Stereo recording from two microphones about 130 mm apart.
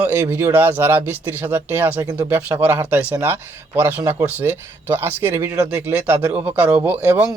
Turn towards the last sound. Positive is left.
turn(degrees=-15)  # may be behind; listen again after turning